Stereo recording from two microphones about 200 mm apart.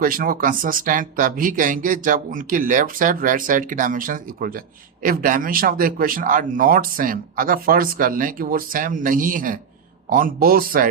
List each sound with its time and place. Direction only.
0.0 s speech: 45° right (ahead or behind)